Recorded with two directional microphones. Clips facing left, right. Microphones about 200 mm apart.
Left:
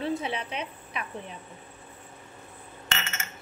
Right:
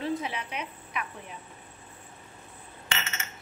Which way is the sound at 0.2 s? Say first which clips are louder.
Left 2 dB; 30° left (ahead or behind).